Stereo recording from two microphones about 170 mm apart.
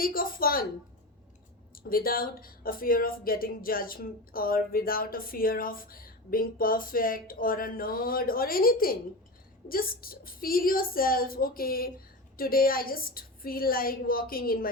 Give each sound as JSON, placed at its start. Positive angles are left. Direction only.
{"t": 0.0, "sound": "speech", "side_deg": 60}
{"t": 1.7, "sound": "speech", "side_deg": 60}